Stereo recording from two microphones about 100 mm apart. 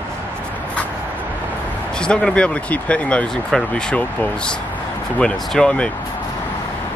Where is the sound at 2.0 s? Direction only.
10° left (ahead or behind).